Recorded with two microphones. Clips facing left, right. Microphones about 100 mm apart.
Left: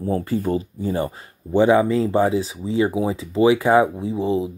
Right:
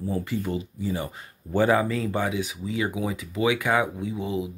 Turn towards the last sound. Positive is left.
turn(degrees=30)  # may be behind; listen again after turning